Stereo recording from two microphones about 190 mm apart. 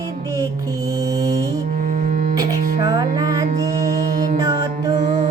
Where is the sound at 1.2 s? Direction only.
20° right (ahead or behind).